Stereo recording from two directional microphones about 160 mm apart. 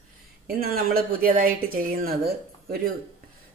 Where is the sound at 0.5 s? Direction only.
70° right (ahead or behind).